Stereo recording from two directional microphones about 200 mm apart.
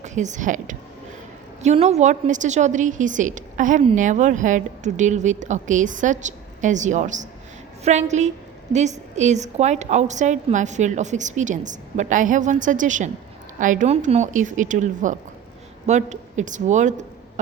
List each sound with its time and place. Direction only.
0.0 s a woman's voice: 35° right (ahead or behind)